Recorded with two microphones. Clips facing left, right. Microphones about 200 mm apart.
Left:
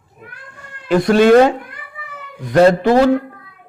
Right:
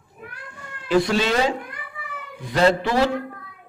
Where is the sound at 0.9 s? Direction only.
55° left (ahead or behind).